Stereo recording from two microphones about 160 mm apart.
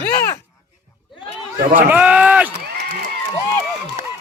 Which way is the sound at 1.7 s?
10° right (ahead or behind).